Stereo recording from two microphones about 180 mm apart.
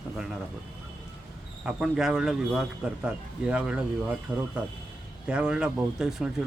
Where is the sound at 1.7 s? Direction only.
5° right (ahead or behind).